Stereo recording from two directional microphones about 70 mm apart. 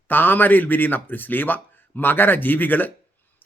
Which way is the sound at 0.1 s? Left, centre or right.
Left.